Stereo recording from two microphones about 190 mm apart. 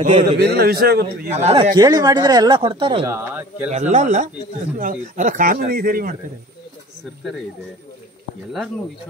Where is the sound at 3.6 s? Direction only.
40° right (ahead or behind).